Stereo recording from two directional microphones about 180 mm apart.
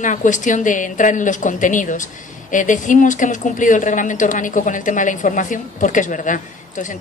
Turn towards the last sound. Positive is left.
turn(degrees=45)  # may be behind; listen again after turning